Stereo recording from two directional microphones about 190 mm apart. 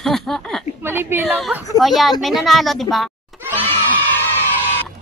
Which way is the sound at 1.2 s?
Centre (ahead or behind).